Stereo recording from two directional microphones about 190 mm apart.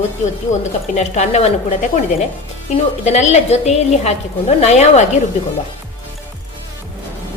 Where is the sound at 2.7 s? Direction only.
35° left (ahead or behind).